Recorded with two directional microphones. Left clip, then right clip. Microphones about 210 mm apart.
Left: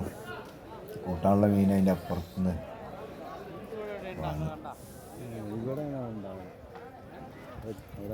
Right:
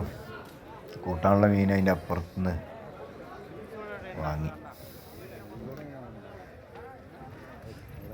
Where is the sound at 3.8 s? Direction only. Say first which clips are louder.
Left 1 dB; 60° left (ahead or behind).